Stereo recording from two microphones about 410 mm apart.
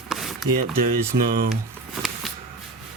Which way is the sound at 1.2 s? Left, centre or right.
Centre.